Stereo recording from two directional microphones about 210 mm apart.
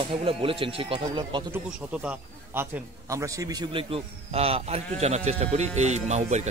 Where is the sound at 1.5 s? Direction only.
5° right (ahead or behind); by 6.5 s 35° right (ahead or behind).